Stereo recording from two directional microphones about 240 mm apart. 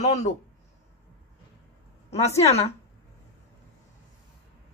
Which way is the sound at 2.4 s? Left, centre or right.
Left.